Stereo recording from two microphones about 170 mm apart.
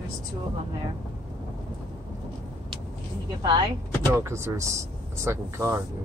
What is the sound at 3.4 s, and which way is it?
Speech, 25° right (ahead or behind).